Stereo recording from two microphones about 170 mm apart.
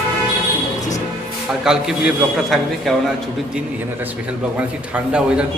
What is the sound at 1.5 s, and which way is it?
A man's voice, 5° right (ahead or behind).